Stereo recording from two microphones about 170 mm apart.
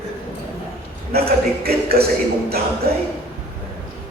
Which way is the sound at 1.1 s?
65° right (ahead or behind).